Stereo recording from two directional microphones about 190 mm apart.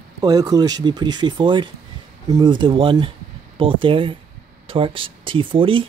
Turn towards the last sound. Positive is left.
turn(degrees=-25)  # may be behind; listen again after turning